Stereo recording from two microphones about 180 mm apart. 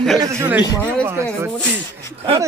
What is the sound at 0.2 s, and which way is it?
Speech, 15° right (ahead or behind).